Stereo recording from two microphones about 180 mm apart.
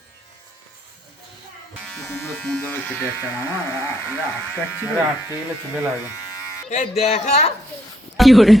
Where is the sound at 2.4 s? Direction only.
10° left (ahead or behind).